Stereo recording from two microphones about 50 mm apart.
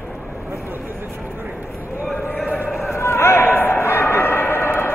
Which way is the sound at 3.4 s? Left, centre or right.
Left.